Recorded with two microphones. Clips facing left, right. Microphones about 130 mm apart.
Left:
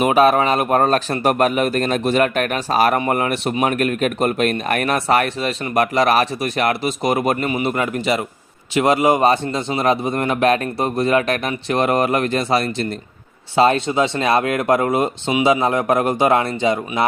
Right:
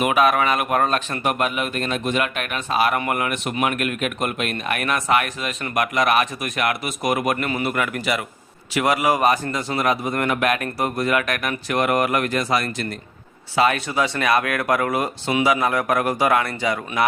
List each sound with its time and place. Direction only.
0.0 s a man's voice: 35° left (ahead or behind)